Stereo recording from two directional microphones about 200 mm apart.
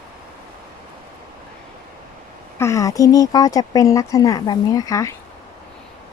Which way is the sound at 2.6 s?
15° left (ahead or behind).